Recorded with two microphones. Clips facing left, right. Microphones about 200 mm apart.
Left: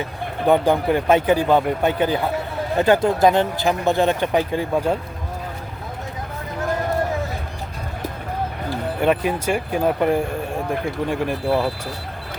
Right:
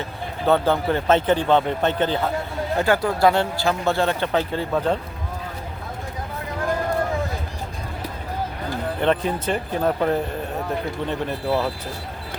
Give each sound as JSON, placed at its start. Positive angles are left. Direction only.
{"t": 0.4, "sound": "speech", "side_deg": 15}
{"t": 9.0, "sound": "speech", "side_deg": 10}